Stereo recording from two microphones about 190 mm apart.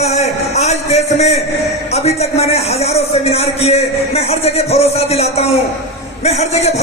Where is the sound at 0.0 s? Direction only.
35° left (ahead or behind).